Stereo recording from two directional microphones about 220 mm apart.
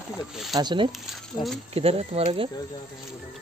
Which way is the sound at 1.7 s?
25° right (ahead or behind).